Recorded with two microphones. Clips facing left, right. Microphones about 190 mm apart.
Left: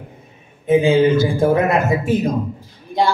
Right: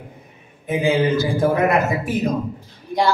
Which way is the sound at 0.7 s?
25° left (ahead or behind).